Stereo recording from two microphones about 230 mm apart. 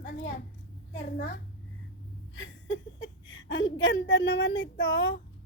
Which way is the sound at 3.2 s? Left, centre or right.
Left.